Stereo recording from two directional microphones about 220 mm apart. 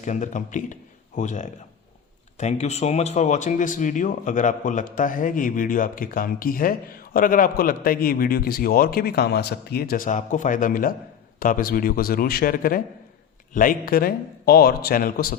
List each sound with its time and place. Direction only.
0.0 s speech: 35° left (ahead or behind)